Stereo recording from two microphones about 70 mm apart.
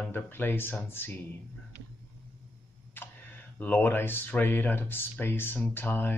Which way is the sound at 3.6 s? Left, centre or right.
Left.